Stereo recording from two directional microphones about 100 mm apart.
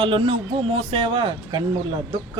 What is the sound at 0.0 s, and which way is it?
A man's voice, 60° right (ahead or behind).